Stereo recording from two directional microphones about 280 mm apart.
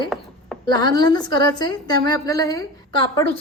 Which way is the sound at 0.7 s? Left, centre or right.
Centre.